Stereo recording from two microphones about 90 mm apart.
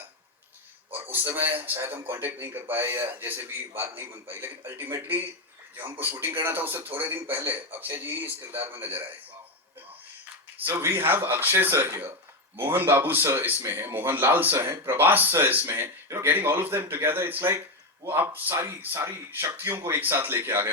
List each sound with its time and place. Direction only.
0.9 s speech: 20° right (ahead or behind)
10.8 s speech: 25° right (ahead or behind)